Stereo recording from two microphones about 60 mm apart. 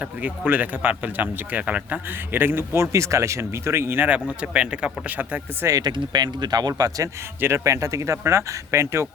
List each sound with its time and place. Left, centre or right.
0.0 s speech: right
2.0 s speech: right
4.1 s speech: centre
5.6 s speech: right
6.7 s speech: right
7.4 s speech: right